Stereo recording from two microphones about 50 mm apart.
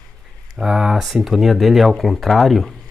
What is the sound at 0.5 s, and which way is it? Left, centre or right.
Speech, centre.